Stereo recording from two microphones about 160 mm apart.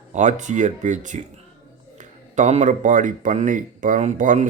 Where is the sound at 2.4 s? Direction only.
50° right (ahead or behind).